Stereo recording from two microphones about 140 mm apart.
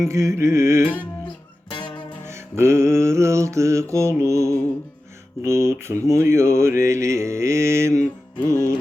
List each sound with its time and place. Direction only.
0.1 s mantra: 20° right (ahead or behind)
2.3 s mantra: 20° right (ahead or behind)
8.4 s music: 20° left (ahead or behind)